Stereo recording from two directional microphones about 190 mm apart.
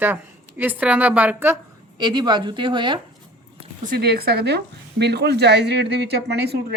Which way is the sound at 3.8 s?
55° right (ahead or behind).